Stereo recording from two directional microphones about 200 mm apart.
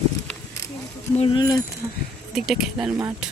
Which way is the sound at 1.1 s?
30° left (ahead or behind).